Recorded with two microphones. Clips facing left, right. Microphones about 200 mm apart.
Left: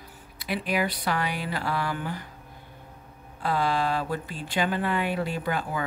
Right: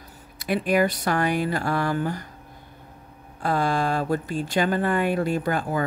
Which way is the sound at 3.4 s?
45° right (ahead or behind).